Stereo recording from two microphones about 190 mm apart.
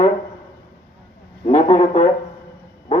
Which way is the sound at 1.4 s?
35° left (ahead or behind).